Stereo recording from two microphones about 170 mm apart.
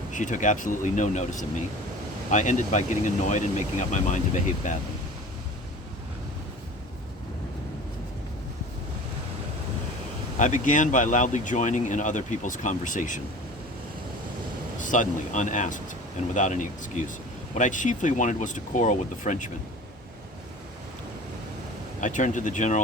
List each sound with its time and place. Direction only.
0.1 s speech: 50° left (ahead or behind)
10.3 s speech: 50° left (ahead or behind)
14.8 s speech: 50° left (ahead or behind)
22.0 s speech: 50° left (ahead or behind)